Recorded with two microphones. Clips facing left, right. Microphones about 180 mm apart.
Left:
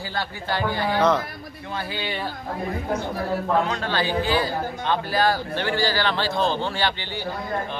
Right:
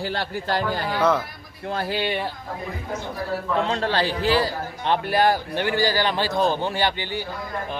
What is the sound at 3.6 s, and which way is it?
Speech, 30° right (ahead or behind).